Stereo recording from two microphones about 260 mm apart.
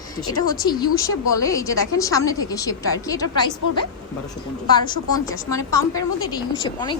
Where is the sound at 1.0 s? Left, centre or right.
Centre.